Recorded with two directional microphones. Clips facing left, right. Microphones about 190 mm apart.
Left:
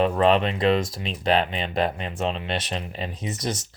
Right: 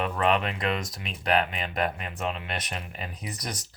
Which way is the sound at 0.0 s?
30° left (ahead or behind).